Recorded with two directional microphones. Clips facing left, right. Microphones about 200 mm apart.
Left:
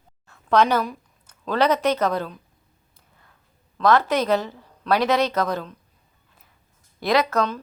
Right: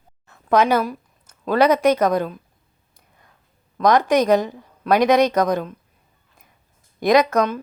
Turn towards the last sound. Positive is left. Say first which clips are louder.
# right 5 dB
turn(degrees=-15)  # may be behind; listen again after turning